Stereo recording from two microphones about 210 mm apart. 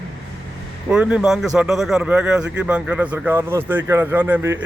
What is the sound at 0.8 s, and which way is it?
Speech, 5° right (ahead or behind).